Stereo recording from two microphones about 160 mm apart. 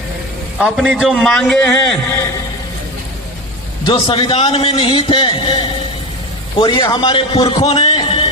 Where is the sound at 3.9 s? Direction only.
30° left (ahead or behind).